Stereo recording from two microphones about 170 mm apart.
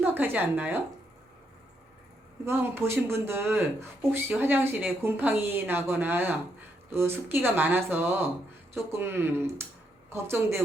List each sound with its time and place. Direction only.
0.0 s speech: 10° right (ahead or behind)
2.4 s speech: 15° right (ahead or behind)